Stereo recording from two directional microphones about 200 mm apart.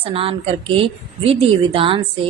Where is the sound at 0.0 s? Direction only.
25° right (ahead or behind).